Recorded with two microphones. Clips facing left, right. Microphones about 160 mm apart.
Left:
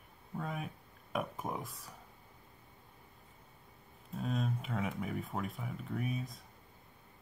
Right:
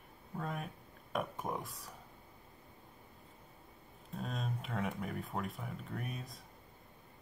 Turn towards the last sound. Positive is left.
turn(degrees=0)  # may be behind; listen again after turning